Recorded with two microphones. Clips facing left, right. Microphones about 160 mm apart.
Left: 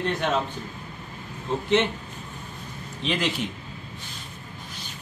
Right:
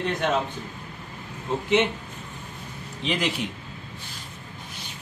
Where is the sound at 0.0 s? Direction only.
Centre (ahead or behind).